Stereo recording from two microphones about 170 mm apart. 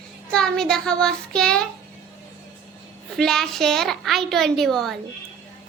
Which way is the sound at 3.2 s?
Centre (ahead or behind).